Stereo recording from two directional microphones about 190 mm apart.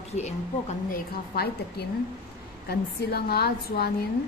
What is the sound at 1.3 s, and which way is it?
A woman's voice, 55° left (ahead or behind).